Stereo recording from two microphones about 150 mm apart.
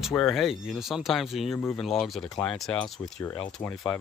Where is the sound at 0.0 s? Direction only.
Centre (ahead or behind).